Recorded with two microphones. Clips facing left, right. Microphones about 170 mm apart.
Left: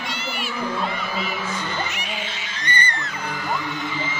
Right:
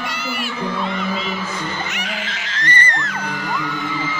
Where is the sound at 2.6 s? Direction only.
90° right.